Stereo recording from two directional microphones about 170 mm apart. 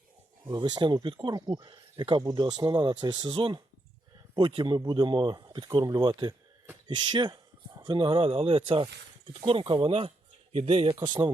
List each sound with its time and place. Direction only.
0.4 s speech: 25° right (ahead or behind)